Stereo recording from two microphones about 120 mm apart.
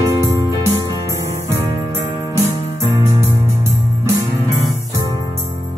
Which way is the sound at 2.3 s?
25° right (ahead or behind).